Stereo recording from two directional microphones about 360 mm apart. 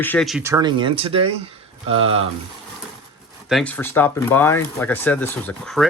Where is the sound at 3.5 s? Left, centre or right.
Centre.